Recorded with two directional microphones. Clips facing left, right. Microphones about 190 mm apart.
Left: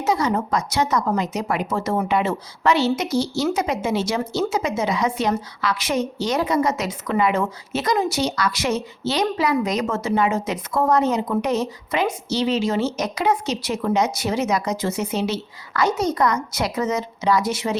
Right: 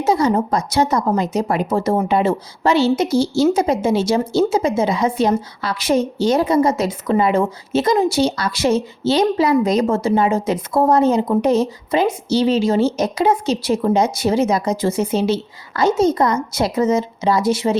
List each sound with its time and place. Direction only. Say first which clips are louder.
0.0 s a woman's voice: right 5 dB; 30° right (ahead or behind)